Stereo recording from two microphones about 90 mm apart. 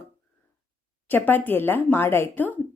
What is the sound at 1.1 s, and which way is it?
Speech, 20° left (ahead or behind).